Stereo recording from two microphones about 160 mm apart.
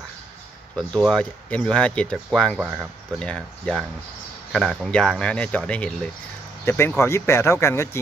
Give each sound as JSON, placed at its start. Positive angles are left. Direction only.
{"t": 0.7, "sound": "speech", "side_deg": 5}